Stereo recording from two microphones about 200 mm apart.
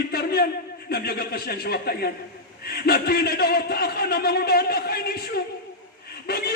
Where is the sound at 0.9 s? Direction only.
50° left (ahead or behind).